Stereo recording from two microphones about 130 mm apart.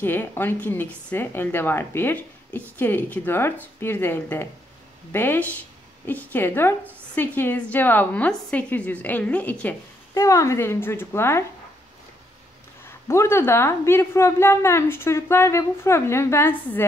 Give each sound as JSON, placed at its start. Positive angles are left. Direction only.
{"t": 0.0, "sound": "a woman's voice", "side_deg": 15}
{"t": 10.1, "sound": "a woman's voice", "side_deg": 25}
{"t": 12.8, "sound": "a woman's voice", "side_deg": 20}